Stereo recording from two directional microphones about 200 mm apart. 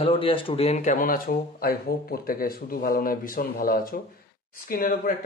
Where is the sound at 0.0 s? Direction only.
25° left (ahead or behind).